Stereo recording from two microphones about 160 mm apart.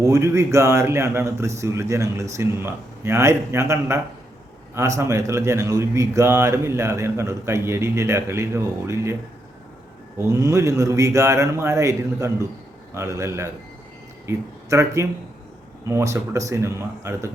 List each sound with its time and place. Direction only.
0.0 s speech: 15° right (ahead or behind)
10.2 s a man's voice: 20° right (ahead or behind)